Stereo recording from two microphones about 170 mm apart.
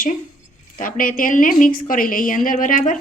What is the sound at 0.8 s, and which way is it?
A woman's voice, 55° left (ahead or behind).